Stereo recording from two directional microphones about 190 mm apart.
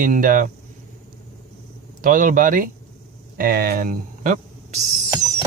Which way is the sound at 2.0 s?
45° right (ahead or behind).